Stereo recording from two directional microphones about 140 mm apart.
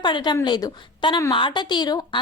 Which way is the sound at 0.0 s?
35° left (ahead or behind).